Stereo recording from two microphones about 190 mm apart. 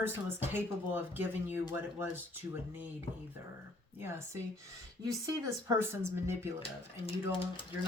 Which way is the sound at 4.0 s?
15° right (ahead or behind).